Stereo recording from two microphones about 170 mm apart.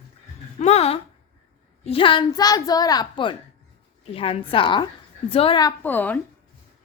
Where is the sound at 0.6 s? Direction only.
40° left (ahead or behind).